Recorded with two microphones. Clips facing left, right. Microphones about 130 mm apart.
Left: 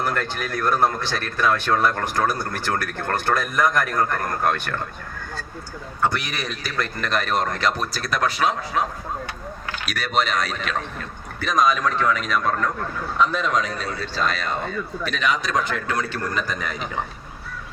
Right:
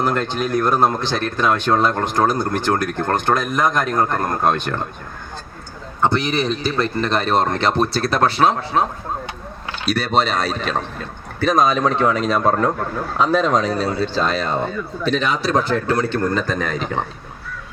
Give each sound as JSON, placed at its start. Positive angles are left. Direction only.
{"t": 0.0, "sound": "speech", "side_deg": -20}
{"t": 6.0, "sound": "speech", "side_deg": -25}